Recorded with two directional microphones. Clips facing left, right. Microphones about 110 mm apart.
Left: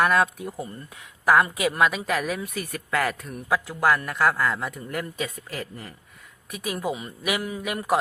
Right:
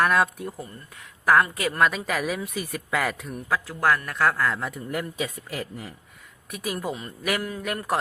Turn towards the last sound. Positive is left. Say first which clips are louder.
# left 2 dB
turn(degrees=5)  # may be behind; listen again after turning